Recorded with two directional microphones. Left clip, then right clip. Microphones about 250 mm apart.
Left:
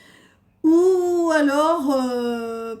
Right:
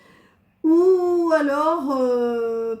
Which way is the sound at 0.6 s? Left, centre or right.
Left.